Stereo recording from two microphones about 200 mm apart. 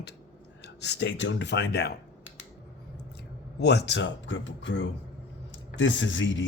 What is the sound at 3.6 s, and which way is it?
Speech, 55° left (ahead or behind).